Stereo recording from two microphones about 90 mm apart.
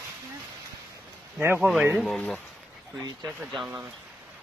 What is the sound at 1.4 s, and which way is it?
Speech, 25° right (ahead or behind).